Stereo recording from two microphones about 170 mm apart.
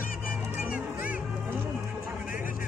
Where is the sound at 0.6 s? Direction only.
10° right (ahead or behind).